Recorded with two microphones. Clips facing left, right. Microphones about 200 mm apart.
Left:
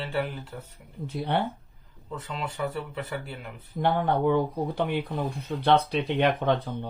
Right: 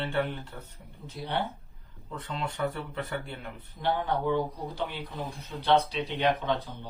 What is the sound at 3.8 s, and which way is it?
Speech, 55° left (ahead or behind).